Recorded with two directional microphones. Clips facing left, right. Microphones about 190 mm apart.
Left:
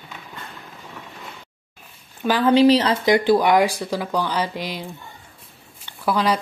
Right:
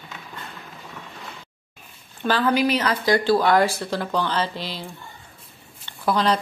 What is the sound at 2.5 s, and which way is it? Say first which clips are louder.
Speech: left 9 dB; 30° left (ahead or behind).